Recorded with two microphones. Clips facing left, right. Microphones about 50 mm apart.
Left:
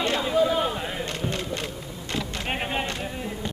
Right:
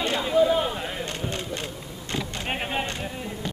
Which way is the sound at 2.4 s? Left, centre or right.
Centre.